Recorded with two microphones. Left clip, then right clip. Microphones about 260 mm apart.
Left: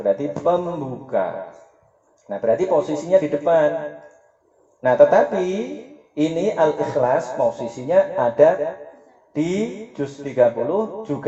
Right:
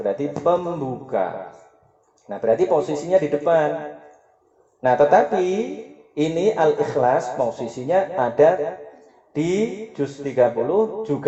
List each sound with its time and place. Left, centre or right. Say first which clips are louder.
0.0 s speech: left 2 dB; right